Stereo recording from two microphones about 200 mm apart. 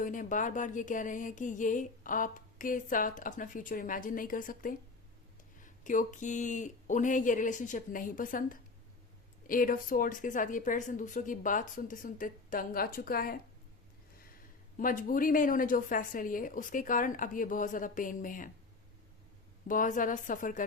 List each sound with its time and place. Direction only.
0.0 s music: 40° left (ahead or behind)
9.5 s a woman's voice: 45° left (ahead or behind)
14.8 s a woman's voice: 45° left (ahead or behind)
19.6 s music: 40° left (ahead or behind)